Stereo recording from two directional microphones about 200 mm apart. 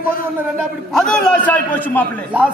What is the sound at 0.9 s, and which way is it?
Speech, centre (ahead or behind).